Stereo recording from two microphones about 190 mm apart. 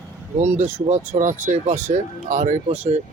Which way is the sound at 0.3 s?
35° right (ahead or behind).